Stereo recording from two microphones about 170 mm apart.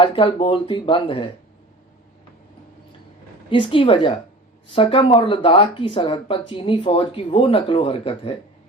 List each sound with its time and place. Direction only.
0.0 s speech: 30° left (ahead or behind)
3.5 s speech: 30° left (ahead or behind)